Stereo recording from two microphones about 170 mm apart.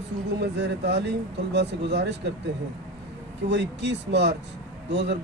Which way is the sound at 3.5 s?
90° right.